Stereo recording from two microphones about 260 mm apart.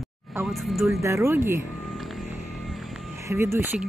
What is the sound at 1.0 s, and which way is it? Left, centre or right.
Speech, centre.